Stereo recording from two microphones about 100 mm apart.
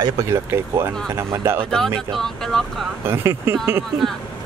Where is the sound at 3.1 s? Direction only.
25° right (ahead or behind).